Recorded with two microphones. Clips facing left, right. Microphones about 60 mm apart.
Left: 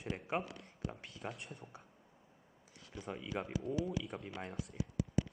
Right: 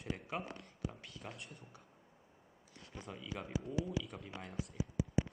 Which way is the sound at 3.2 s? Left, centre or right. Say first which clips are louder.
Left 4 dB; left.